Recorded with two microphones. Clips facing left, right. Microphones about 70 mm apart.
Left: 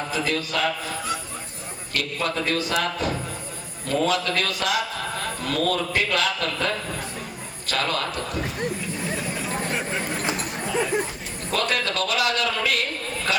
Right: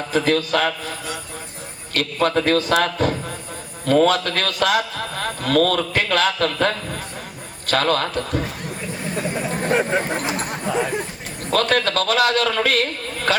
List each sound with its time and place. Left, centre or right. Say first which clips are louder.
0.1 s a man's voice: right 10 dB; right
1.9 s a man's voice: right 7 dB; right
9.6 s speech: right 8 dB; right
10.3 s a sound: right 3 dB; right
11.5 s a man's voice: right 6 dB; right